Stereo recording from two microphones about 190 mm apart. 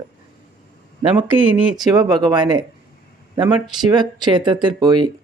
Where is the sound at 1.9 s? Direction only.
20° right (ahead or behind).